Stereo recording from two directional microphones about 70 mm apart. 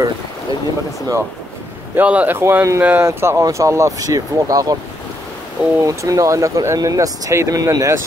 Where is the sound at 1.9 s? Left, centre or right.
Right.